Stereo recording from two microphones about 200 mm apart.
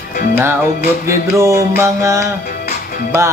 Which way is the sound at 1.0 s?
15° right (ahead or behind).